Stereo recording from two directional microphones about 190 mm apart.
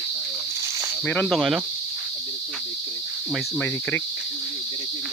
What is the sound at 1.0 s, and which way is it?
Cricket, 10° left (ahead or behind).